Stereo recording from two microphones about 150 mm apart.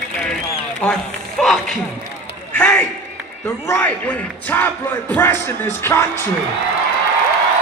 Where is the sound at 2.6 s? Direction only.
5° left (ahead or behind).